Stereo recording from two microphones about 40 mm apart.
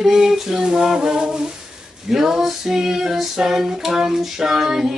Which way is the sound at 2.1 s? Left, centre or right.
Centre.